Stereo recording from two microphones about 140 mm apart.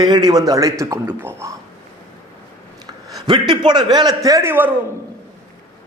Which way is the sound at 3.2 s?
30° right (ahead or behind).